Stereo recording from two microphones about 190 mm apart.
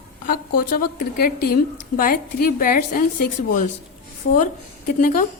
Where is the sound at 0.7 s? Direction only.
55° left (ahead or behind).